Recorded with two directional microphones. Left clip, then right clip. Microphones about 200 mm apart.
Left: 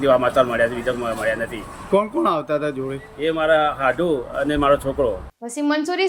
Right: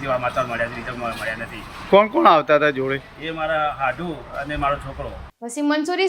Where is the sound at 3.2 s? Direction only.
25° left (ahead or behind).